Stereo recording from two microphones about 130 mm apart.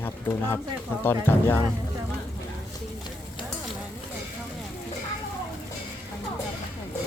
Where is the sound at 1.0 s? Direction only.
15° left (ahead or behind).